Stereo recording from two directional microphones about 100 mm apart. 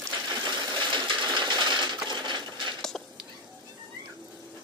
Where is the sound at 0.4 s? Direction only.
50° right (ahead or behind).